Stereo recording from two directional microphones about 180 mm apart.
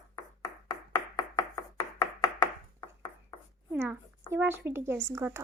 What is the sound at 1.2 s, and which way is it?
Chopping, 25° left (ahead or behind).